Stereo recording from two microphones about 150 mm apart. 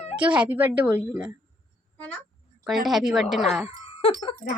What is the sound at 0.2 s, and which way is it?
A woman's voice, 10° right (ahead or behind).